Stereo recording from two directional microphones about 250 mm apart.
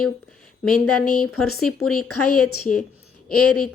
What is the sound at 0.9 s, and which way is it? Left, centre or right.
Speech, left.